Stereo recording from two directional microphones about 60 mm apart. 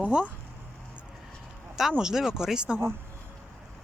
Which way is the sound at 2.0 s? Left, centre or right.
Centre.